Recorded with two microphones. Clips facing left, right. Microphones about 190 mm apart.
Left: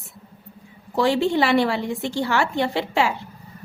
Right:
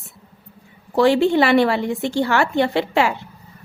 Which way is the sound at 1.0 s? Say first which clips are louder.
Right 4 dB; 60° right (ahead or behind).